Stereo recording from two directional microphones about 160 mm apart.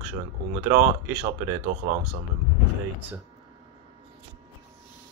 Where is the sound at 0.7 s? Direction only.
15° right (ahead or behind).